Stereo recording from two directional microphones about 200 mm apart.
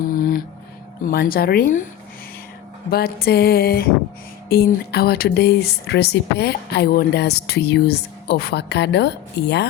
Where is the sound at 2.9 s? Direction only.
50° left (ahead or behind).